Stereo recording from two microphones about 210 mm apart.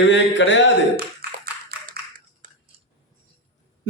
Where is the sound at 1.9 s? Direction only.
40° right (ahead or behind).